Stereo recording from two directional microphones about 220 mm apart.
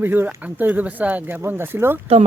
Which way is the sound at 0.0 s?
10° right (ahead or behind).